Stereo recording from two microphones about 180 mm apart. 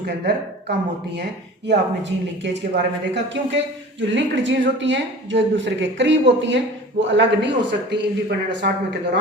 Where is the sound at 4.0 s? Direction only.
90° right.